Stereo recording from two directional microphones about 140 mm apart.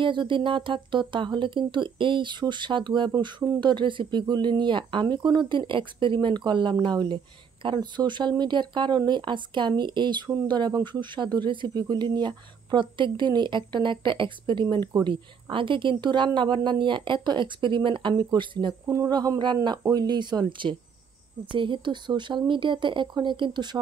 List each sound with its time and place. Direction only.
0.0 s a woman's voice: 35° right (ahead or behind)